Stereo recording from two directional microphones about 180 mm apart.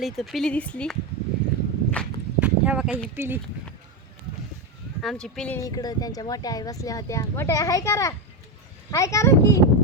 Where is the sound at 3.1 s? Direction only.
10° right (ahead or behind).